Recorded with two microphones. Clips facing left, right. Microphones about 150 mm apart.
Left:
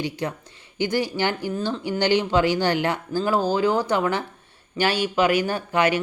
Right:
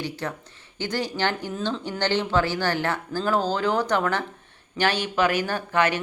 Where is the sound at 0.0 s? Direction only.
15° left (ahead or behind).